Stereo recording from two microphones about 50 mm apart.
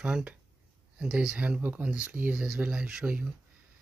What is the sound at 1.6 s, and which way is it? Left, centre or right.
Speech, right.